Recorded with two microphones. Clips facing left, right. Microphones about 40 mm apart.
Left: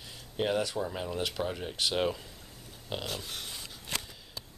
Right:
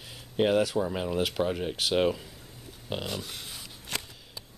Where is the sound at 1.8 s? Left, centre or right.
Centre.